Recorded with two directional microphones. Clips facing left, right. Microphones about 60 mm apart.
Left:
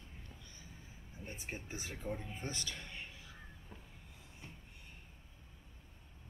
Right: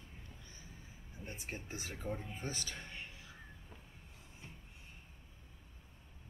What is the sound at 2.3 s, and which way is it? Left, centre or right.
Music, right.